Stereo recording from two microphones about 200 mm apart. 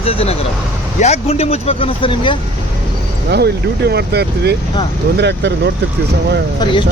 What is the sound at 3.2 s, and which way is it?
Speech, 55° right (ahead or behind).